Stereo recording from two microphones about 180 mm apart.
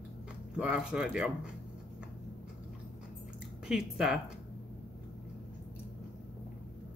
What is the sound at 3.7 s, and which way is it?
Speech, 5° right (ahead or behind).